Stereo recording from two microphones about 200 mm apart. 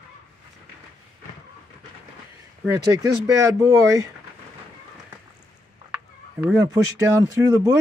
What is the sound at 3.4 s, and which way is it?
Speech, 15° right (ahead or behind).